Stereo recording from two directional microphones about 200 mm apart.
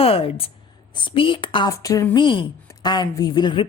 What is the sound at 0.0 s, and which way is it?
A woman's voice, 30° left (ahead or behind).